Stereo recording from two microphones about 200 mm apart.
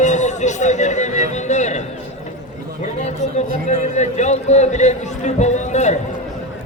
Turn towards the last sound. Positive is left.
turn(degrees=35)  # may be behind; listen again after turning